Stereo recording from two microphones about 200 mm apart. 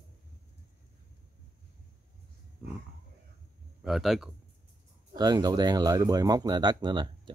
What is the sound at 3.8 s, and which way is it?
Speech, centre (ahead or behind).